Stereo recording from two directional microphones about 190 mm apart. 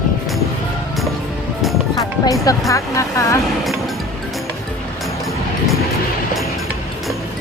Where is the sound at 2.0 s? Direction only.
20° left (ahead or behind).